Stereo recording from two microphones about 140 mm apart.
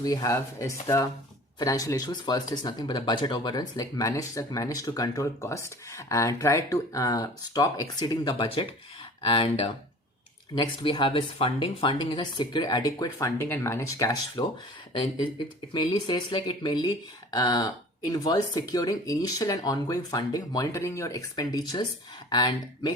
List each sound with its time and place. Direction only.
0.0 s speech: 25° left (ahead or behind)
15.7 s speech: 30° left (ahead or behind)